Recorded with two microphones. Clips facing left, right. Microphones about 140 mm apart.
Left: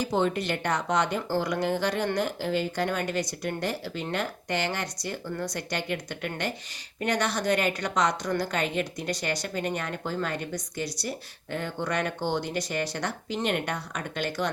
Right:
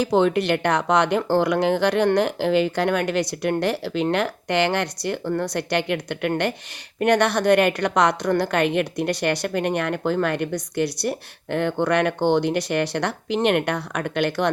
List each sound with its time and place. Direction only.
0.0 s a woman's voice: 70° right (ahead or behind)